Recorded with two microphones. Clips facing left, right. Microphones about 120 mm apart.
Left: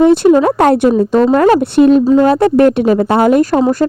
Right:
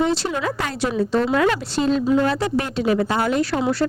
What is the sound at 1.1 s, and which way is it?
Speech, 45° left (ahead or behind).